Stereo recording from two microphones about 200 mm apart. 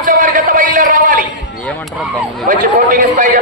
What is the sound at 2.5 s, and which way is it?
Speech, 40° right (ahead or behind).